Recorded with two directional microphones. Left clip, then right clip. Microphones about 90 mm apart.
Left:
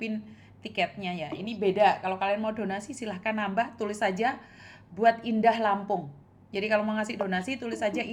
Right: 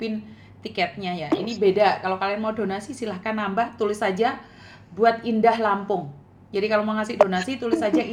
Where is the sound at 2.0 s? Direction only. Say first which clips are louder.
Right 3 dB; 35° left (ahead or behind).